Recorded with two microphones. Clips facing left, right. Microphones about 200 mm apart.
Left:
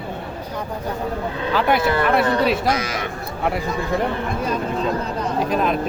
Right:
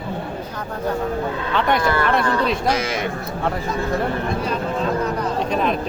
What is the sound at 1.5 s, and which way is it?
Speech, 5° left (ahead or behind).